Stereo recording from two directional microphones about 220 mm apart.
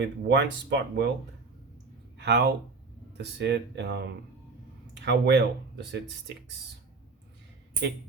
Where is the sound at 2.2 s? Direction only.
50° right (ahead or behind).